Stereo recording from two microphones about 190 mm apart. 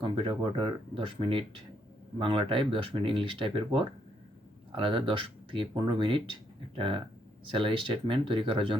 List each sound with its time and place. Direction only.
0.0 s speech: 25° right (ahead or behind)